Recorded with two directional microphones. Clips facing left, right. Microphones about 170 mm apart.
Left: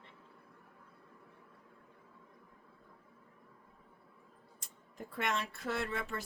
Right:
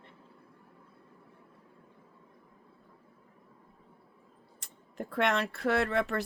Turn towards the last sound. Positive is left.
turn(degrees=-70)  # may be behind; listen again after turning